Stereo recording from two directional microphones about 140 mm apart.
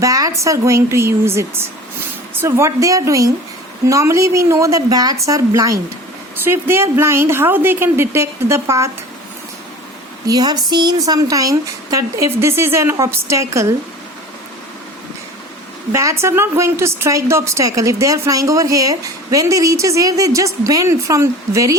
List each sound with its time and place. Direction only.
0.0 s a woman's voice: 25° right (ahead or behind)
10.2 s a woman's voice: 30° right (ahead or behind)
15.9 s a woman's voice: 20° right (ahead or behind)